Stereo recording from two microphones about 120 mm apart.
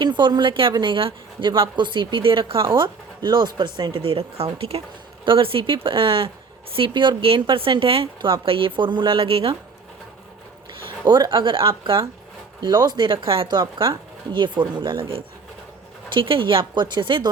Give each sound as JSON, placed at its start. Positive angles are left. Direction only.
{"t": 0.0, "sound": "a woman's voice", "side_deg": -40}
{"t": 10.8, "sound": "a woman's voice", "side_deg": -35}